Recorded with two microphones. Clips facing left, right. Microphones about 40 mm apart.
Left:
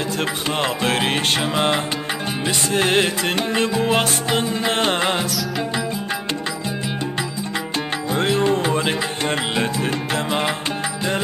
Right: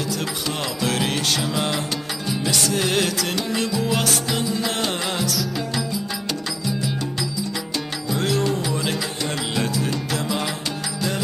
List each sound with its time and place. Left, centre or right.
0.6 s music: left
8.1 s music: left